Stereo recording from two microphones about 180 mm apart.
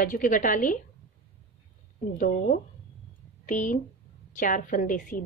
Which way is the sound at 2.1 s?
45° left (ahead or behind).